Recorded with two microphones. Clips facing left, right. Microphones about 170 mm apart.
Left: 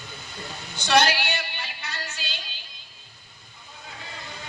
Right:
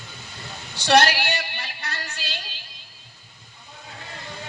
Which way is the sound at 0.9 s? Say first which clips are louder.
Right 3 dB; 55° right (ahead or behind).